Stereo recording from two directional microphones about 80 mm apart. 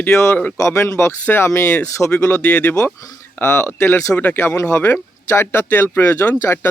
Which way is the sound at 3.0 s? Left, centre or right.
Left.